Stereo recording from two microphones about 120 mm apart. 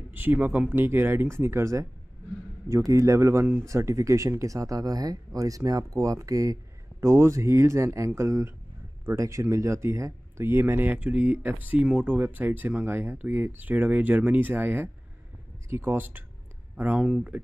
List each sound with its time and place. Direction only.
0.1 s speech: 15° right (ahead or behind)
2.9 s speech: 25° right (ahead or behind)
17.0 s speech: 5° right (ahead or behind)